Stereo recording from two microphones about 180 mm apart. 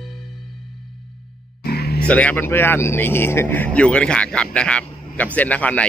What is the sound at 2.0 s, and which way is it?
Speech, 5° left (ahead or behind).